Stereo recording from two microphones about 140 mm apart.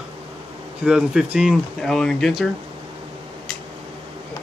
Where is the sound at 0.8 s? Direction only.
5° right (ahead or behind).